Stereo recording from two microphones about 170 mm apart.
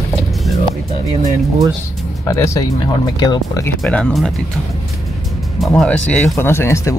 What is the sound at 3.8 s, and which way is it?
Speech, 5° left (ahead or behind).